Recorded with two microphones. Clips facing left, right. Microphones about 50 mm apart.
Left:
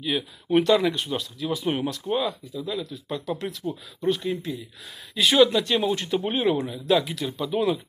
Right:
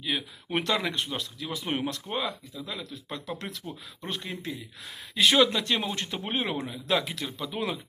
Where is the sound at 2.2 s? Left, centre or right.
Right.